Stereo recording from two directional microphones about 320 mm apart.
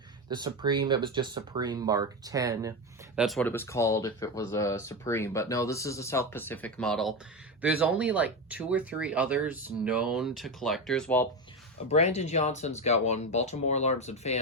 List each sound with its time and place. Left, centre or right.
0.3 s speech: centre
3.2 s speech: centre
11.9 s speech: left